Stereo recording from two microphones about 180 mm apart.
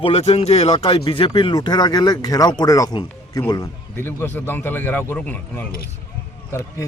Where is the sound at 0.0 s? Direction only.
35° left (ahead or behind); by 5.6 s 10° left (ahead or behind).